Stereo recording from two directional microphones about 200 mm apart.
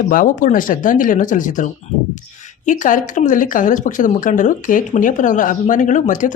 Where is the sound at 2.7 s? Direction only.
40° left (ahead or behind).